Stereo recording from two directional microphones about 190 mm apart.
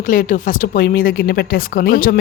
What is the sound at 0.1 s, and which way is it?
Speech, 45° left (ahead or behind).